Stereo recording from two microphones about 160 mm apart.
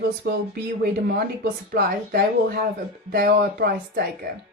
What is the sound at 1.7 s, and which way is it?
Speech, 70° right (ahead or behind).